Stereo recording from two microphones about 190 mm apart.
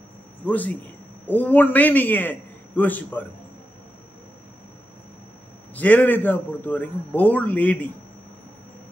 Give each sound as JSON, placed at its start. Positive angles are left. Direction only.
{"t": 0.5, "sound": "a man's voice", "side_deg": 10}
{"t": 5.8, "sound": "a man's voice", "side_deg": 10}